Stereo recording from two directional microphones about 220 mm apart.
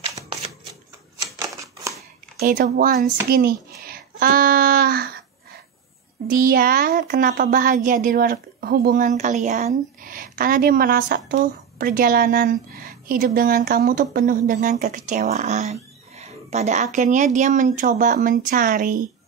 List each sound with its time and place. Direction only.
2.3 s a woman's voice: 40° right (ahead or behind)
6.2 s a woman's voice: 40° right (ahead or behind)